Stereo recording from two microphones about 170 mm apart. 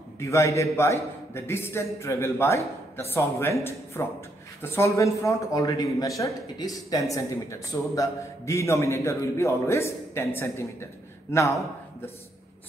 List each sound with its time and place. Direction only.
0.2 s a man's voice: 15° left (ahead or behind)